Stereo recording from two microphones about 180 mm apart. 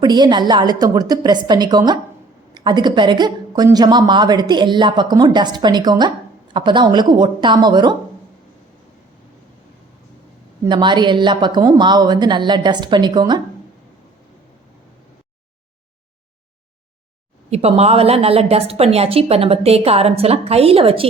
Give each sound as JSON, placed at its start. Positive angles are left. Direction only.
{"t": 0.0, "sound": "a woman's voice", "side_deg": -25}
{"t": 10.7, "sound": "a woman's voice", "side_deg": -25}
{"t": 17.5, "sound": "a woman's voice", "side_deg": -35}